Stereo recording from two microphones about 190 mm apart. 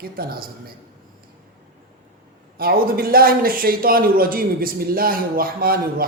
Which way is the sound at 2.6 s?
50° right (ahead or behind).